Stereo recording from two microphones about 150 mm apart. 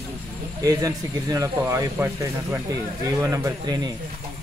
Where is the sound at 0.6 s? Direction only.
25° right (ahead or behind).